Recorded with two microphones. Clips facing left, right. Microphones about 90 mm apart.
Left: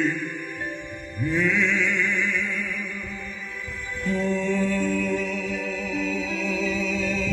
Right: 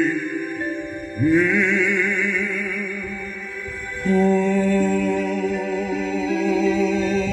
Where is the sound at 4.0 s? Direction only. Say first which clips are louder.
Right 8 dB; 55° right (ahead or behind).